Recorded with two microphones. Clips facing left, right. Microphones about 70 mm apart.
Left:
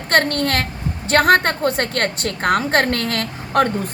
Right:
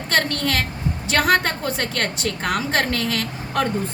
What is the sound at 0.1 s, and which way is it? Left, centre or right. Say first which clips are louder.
A woman's voice: left 4 dB; left.